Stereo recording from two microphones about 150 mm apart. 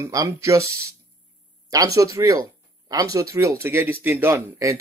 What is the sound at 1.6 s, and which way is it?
Speech, 20° right (ahead or behind).